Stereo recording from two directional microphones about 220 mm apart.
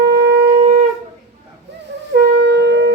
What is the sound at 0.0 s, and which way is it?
Shofar, 50° right (ahead or behind).